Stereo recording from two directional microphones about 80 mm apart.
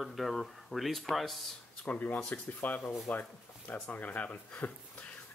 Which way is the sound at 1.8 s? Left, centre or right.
Centre.